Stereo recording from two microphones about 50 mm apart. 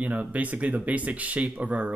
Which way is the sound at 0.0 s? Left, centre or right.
Right.